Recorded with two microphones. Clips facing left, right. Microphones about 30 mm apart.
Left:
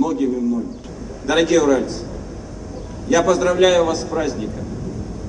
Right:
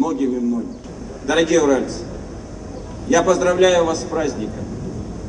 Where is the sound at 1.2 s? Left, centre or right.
Centre.